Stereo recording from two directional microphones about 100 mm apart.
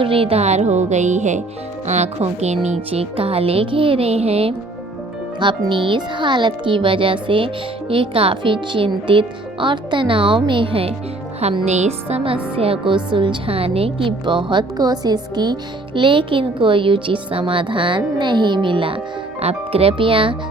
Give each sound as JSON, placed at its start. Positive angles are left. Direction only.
{"t": 0.0, "sound": "music", "side_deg": -65}
{"t": 2.1, "sound": "speech", "side_deg": -90}
{"t": 2.6, "sound": "music", "side_deg": -90}
{"t": 5.4, "sound": "speech", "side_deg": -55}
{"t": 11.6, "sound": "speech", "side_deg": -90}
{"t": 16.0, "sound": "speech", "side_deg": -55}
{"t": 19.4, "sound": "music", "side_deg": -80}